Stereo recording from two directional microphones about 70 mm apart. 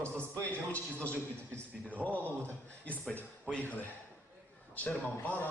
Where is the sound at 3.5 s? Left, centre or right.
Left.